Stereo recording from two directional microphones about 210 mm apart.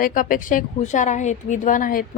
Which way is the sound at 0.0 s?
40° left (ahead or behind).